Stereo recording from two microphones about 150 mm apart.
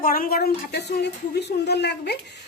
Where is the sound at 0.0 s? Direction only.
75° left (ahead or behind).